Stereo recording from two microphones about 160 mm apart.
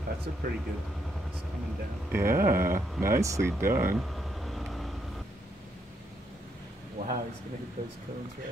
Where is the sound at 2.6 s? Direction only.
15° right (ahead or behind).